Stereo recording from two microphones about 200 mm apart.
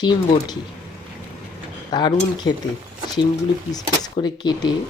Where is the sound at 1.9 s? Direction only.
20° left (ahead or behind).